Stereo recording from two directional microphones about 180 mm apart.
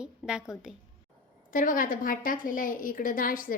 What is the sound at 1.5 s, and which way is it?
A woman's voice, 50° left (ahead or behind).